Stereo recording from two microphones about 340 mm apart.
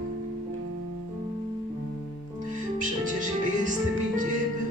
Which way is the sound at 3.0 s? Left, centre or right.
Right.